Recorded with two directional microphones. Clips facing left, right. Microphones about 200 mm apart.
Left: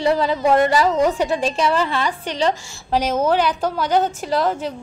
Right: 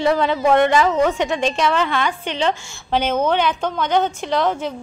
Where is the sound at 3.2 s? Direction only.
5° left (ahead or behind).